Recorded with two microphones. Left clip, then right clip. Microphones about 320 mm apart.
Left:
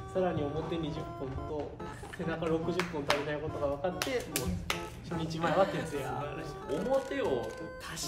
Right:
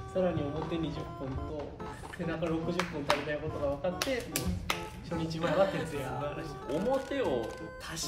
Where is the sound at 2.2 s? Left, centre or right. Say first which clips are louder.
Left 1 dB; centre.